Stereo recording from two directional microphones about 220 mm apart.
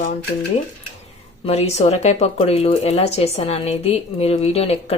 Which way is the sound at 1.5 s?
30° left (ahead or behind).